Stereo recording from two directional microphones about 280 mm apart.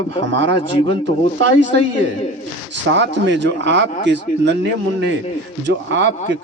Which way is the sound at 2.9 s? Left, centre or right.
Right.